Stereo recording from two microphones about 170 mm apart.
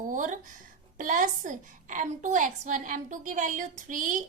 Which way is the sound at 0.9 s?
50° right (ahead or behind).